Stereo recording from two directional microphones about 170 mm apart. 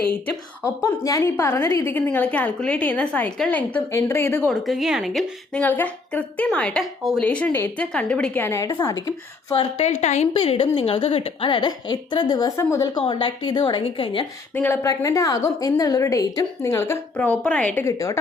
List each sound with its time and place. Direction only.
0.1 s a woman's voice: 15° left (ahead or behind)
4.4 s a woman's voice: centre (ahead or behind); by 9.6 s 20° left (ahead or behind)
9.8 s a woman's voice: 40° left (ahead or behind); by 13.0 s 20° left (ahead or behind)
13.0 s a woman's voice: 30° left (ahead or behind)
14.5 s a woman's voice: 15° left (ahead or behind)